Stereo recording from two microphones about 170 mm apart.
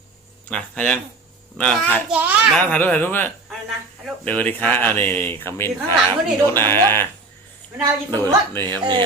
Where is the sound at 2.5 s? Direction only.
10° left (ahead or behind).